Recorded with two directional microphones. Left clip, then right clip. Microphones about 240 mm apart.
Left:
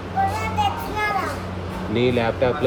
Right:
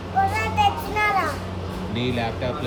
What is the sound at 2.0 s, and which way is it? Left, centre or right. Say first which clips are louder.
Speech: left 7 dB; left.